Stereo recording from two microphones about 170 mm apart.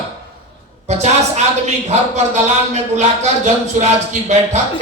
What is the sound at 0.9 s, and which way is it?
Speech, 40° right (ahead or behind).